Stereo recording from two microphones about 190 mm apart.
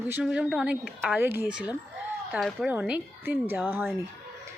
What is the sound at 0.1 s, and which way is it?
A woman's voice, 5° right (ahead or behind).